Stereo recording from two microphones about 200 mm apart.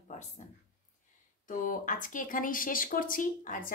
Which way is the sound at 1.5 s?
40° left (ahead or behind).